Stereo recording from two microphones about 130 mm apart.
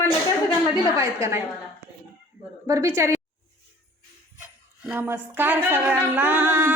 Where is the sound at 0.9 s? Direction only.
20° right (ahead or behind).